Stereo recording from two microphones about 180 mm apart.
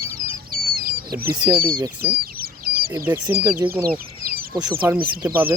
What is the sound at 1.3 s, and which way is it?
Speech, 25° right (ahead or behind).